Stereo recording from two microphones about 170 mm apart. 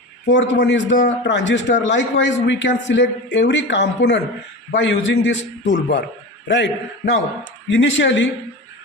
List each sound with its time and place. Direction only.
0.3 s a man's voice: 90° left
0.9 s a man's voice: 45° left (ahead or behind)
1.2 s a man's voice: 90° left